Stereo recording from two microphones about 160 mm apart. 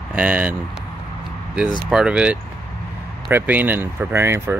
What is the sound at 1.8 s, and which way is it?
Speech, 5° right (ahead or behind).